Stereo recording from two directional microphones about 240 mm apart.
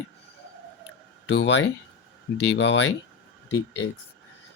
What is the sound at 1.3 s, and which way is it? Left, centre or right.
Speech, left.